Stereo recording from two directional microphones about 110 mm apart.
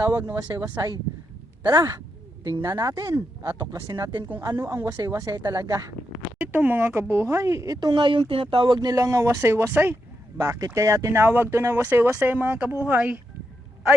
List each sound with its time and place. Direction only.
0.0 s speech: 20° right (ahead or behind); by 3.1 s 35° right (ahead or behind)
3.1 s speech: 15° right (ahead or behind)
3.7 s speech: 40° right (ahead or behind)
4.4 s speech: 30° right (ahead or behind)
6.4 s speech: 15° right (ahead or behind)